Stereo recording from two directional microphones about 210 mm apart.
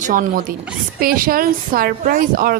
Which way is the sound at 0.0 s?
40° right (ahead or behind).